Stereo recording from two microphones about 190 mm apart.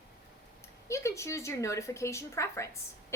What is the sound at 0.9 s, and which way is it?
A woman's voice, 15° left (ahead or behind).